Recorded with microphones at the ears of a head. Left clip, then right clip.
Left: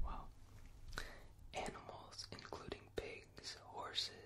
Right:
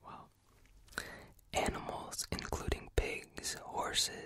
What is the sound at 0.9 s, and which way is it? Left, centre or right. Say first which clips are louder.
Whispering: right 7 dB; right.